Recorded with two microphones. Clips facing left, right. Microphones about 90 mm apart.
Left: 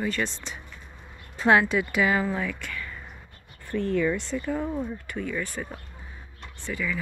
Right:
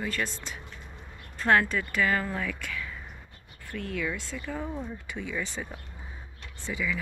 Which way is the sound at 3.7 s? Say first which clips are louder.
Left 8 dB; 15° left (ahead or behind).